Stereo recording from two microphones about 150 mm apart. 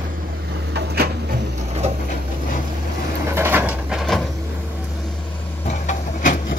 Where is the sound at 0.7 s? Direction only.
90° right.